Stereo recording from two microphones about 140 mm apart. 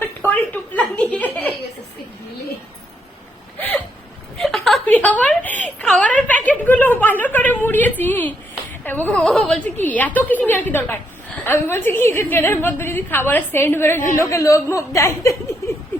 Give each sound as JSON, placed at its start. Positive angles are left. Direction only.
{"t": 0.0, "sound": "giggle", "side_deg": 15}
{"t": 3.6, "sound": "hiccup", "side_deg": 10}
{"t": 4.4, "sound": "a sound", "side_deg": 0}
{"t": 8.8, "sound": "a woman's voice", "side_deg": 10}